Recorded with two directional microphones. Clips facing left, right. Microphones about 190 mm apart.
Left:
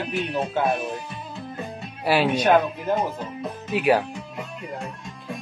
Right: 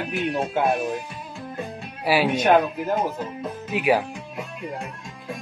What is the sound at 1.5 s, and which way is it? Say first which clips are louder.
A man's voice: right 1 dB; 10° right (ahead or behind).